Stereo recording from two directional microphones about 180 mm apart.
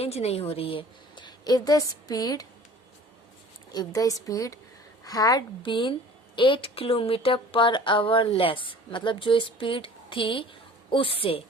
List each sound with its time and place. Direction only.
0.0 s a woman's voice: 35° left (ahead or behind); by 2.5 s 20° left (ahead or behind)
3.7 s a woman's voice: 20° left (ahead or behind)